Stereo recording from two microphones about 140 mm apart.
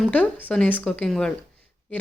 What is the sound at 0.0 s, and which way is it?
A woman's voice, 10° left (ahead or behind).